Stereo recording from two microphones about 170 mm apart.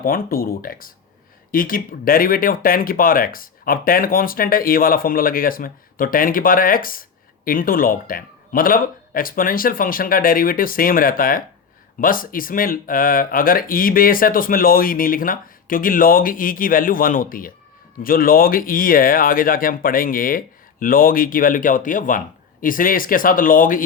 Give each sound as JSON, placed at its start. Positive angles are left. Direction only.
{"t": 0.0, "sound": "speech", "side_deg": 60}